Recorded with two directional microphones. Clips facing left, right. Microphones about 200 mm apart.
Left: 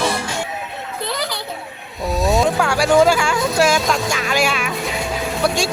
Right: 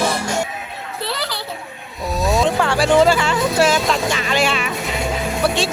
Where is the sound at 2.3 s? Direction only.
Centre (ahead or behind).